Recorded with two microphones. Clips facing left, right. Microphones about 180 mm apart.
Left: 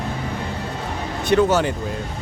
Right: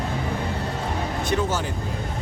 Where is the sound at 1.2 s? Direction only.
70° left (ahead or behind).